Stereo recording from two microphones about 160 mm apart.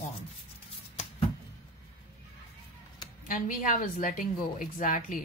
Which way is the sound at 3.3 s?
60° left (ahead or behind).